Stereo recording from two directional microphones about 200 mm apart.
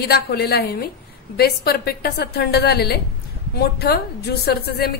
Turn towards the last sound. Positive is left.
turn(degrees=50)  # may be behind; listen again after turning